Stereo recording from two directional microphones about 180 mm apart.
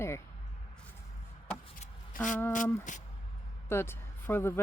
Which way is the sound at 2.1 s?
50° left (ahead or behind).